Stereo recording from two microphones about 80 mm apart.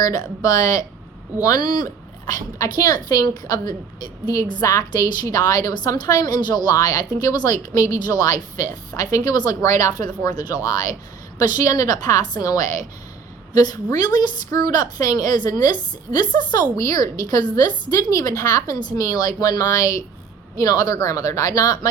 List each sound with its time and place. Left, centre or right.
0.0 s a woman's voice: left
9.3 s a woman's voice: left
9.6 s a woman's voice: left
15.7 s a woman's voice: left
16.7 s a woman's voice: left